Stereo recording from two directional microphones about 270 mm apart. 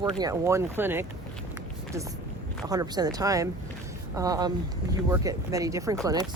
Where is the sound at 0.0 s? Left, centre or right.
Centre.